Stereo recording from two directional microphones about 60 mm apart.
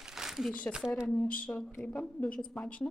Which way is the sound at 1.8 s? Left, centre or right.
Left.